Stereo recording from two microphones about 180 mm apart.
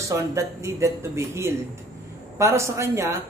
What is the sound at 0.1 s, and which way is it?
Speech, 15° right (ahead or behind).